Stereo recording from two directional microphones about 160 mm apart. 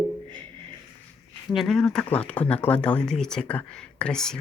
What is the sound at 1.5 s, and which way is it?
Speech, centre (ahead or behind).